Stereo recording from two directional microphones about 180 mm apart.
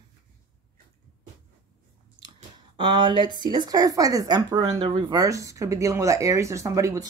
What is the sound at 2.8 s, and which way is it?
Speech, 25° right (ahead or behind).